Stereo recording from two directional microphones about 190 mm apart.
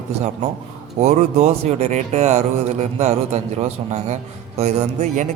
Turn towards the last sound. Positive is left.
turn(degrees=-40)  # may be behind; listen again after turning